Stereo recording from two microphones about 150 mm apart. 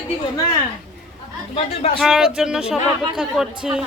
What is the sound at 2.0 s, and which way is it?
Speech, 5° right (ahead or behind).